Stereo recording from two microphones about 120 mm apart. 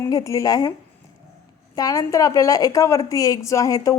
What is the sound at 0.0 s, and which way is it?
Speech, 30° left (ahead or behind).